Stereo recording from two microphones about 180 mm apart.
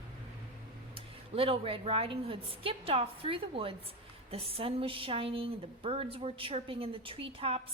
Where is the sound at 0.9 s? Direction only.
30° right (ahead or behind).